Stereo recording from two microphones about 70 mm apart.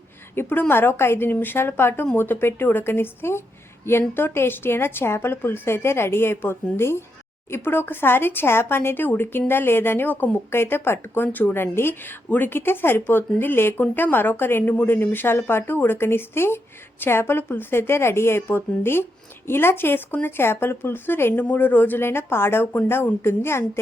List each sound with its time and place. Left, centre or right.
0.3 s a woman's voice: left